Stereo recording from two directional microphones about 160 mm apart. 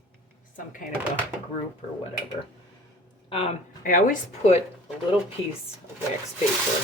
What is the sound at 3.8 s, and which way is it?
Speech, 60° left (ahead or behind).